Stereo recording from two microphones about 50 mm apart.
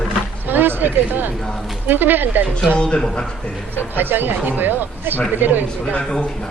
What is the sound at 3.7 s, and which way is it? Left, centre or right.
Speech, right.